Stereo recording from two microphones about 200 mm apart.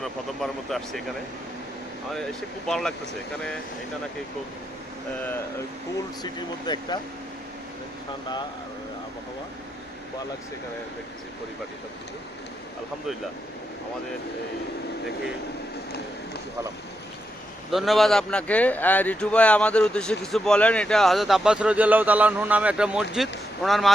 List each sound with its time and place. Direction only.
0.0 s speech: centre (ahead or behind)
2.6 s speech: 5° left (ahead or behind)
6.7 s speech: 20° left (ahead or behind)
17.7 s speech: centre (ahead or behind)